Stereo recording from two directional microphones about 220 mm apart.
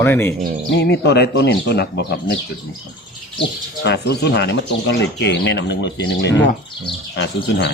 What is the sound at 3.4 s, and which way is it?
Speech, 50° left (ahead or behind).